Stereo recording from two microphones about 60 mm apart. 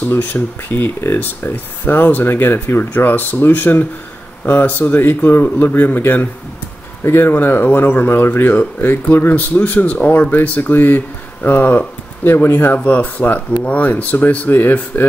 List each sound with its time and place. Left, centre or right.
0.1 s speech: left
7.0 s speech: left